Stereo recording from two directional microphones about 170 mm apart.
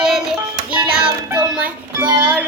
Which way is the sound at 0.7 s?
30° right (ahead or behind).